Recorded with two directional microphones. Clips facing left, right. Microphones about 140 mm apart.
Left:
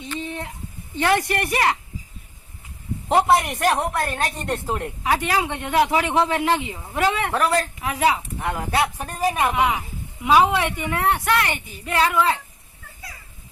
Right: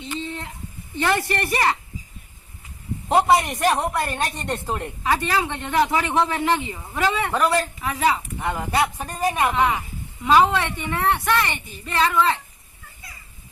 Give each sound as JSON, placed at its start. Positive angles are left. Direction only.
{"t": 0.2, "sound": "a sound", "side_deg": 15}
{"t": 0.9, "sound": "a woman's voice", "side_deg": 10}
{"t": 3.1, "sound": "a woman's voice", "side_deg": 0}
{"t": 7.9, "sound": "a woman's voice", "side_deg": 10}
{"t": 8.4, "sound": "a woman's voice", "side_deg": 0}